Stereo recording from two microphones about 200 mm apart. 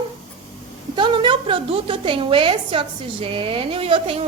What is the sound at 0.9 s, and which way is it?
A woman's voice, 25° right (ahead or behind).